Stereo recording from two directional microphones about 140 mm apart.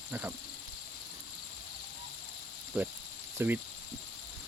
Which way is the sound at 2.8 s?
10° right (ahead or behind).